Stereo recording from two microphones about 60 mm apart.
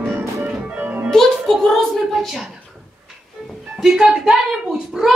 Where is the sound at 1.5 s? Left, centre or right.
Centre.